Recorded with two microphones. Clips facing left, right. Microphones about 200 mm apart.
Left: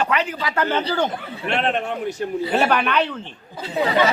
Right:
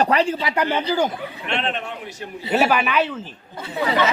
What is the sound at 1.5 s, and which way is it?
Speech, 45° left (ahead or behind).